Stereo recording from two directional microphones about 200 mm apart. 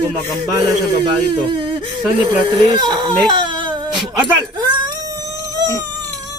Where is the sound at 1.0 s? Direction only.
25° right (ahead or behind).